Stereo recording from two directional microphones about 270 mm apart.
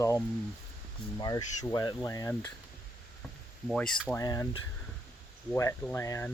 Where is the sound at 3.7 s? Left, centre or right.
Centre.